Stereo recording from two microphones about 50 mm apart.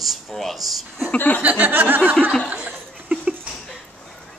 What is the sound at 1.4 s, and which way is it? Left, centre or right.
Speech, right.